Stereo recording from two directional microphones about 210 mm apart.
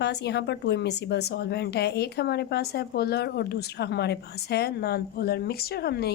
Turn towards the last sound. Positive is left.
turn(degrees=50)  # may be behind; listen again after turning